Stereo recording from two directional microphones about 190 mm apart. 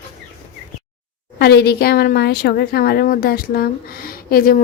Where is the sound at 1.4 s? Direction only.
60° left (ahead or behind).